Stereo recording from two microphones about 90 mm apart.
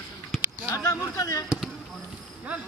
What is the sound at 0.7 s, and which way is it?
Speech, 35° left (ahead or behind).